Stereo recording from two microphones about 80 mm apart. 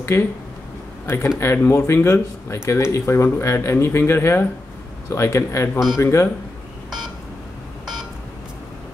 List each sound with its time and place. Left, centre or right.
0.1 s speech: left